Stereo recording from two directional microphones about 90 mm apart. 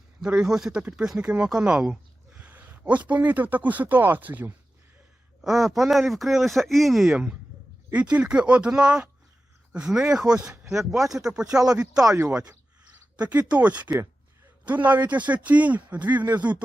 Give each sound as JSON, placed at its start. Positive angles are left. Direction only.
{"t": 0.2, "sound": "speech", "side_deg": -10}
{"t": 5.4, "sound": "speech", "side_deg": -5}
{"t": 10.7, "sound": "speech", "side_deg": -5}
{"t": 12.5, "sound": "a sound", "side_deg": -15}
{"t": 14.8, "sound": "speech", "side_deg": -20}